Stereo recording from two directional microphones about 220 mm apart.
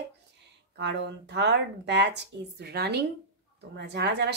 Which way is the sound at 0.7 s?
50° right (ahead or behind).